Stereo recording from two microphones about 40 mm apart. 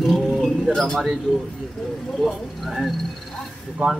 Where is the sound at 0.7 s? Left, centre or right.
Centre.